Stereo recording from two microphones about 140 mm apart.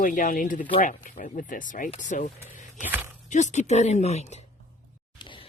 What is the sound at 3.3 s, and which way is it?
Speech, 60° left (ahead or behind).